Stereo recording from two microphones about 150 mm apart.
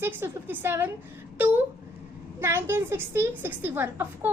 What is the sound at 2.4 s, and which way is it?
A woman's voice, 15° right (ahead or behind).